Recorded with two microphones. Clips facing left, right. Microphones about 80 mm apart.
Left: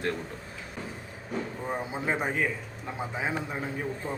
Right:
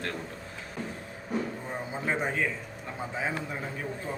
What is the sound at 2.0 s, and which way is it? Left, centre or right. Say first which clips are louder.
A man's voice: even; centre.